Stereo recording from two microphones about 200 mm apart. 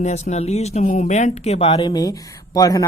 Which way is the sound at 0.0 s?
35° left (ahead or behind).